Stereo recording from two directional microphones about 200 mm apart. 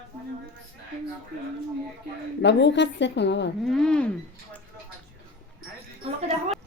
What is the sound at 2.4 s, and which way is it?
A woman's voice, 60° left (ahead or behind).